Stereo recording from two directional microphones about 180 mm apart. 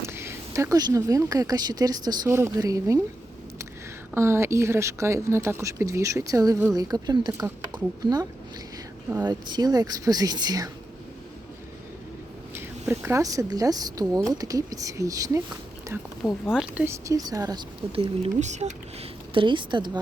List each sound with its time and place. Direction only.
0.0 s speech: 15° right (ahead or behind)
4.1 s speech: 15° right (ahead or behind)
12.9 s speech: 15° right (ahead or behind)
16.5 s speech: 5° right (ahead or behind); by 18.7 s 40° right (ahead or behind)
19.3 s speech: 25° right (ahead or behind)